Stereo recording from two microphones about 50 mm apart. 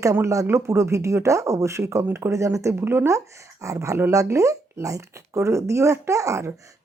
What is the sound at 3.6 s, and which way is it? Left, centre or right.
Speech, right.